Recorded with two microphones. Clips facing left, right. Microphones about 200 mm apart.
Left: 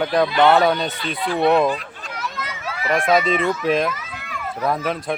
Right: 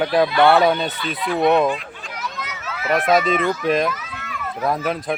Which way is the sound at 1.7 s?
40° left (ahead or behind).